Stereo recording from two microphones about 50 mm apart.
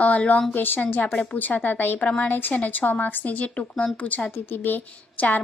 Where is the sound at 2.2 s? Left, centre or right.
Left.